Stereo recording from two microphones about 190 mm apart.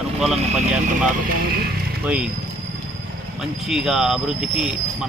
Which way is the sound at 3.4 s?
Centre (ahead or behind).